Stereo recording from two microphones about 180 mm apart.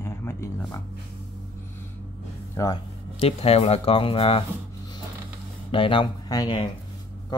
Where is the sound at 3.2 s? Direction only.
35° left (ahead or behind).